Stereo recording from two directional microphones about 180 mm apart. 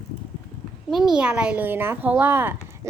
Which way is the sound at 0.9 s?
Centre (ahead or behind).